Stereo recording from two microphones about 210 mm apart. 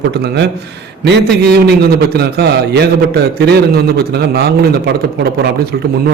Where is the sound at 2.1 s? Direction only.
50° right (ahead or behind).